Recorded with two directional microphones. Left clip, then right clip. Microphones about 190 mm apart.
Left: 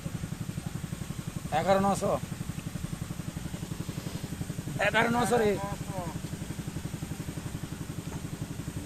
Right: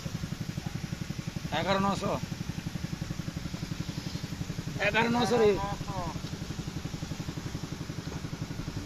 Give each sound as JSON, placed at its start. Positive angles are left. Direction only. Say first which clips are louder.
{"t": 1.5, "sound": "speech", "louder": "left 3 dB", "side_deg": 65}
{"t": 4.8, "sound": "speech", "louder": "left 1 dB", "side_deg": 50}